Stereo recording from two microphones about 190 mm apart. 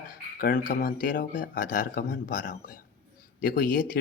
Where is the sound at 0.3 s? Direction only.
50° left (ahead or behind).